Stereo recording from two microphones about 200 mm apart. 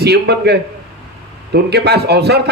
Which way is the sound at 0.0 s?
55° right (ahead or behind).